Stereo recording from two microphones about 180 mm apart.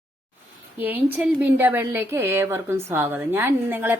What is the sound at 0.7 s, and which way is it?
A woman's voice, 10° right (ahead or behind).